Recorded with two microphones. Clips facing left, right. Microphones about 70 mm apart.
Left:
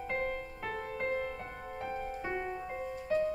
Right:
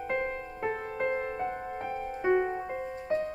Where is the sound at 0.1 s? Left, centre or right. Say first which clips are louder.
Right 3 dB; right.